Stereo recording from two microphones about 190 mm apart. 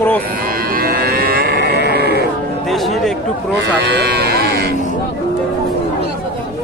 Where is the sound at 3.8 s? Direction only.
60° right (ahead or behind).